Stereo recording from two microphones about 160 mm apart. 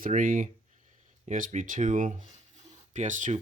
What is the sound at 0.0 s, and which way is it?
Speech, 55° right (ahead or behind).